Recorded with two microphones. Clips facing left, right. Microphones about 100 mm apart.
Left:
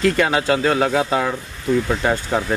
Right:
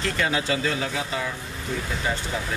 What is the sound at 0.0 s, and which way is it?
Speech, 60° left (ahead or behind).